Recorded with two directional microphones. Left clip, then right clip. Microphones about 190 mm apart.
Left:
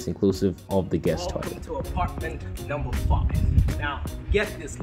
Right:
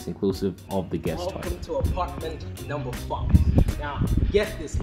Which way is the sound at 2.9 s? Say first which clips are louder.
Right 2 dB; centre (ahead or behind).